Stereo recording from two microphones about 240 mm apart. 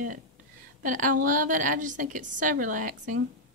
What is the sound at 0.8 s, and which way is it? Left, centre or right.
Speech, right.